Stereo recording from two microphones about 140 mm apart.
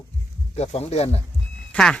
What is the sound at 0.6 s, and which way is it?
Speech, 50° left (ahead or behind).